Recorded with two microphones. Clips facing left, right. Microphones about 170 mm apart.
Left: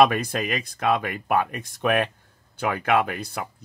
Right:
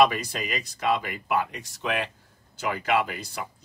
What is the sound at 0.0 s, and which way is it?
Speech, 55° left (ahead or behind).